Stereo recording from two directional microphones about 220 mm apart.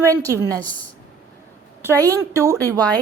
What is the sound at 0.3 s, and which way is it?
Speech, 15° right (ahead or behind).